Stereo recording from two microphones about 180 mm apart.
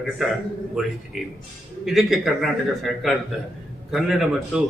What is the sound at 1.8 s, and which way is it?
A man's voice, centre (ahead or behind).